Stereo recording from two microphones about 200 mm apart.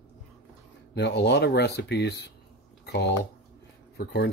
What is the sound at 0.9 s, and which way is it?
Speech, 55° left (ahead or behind).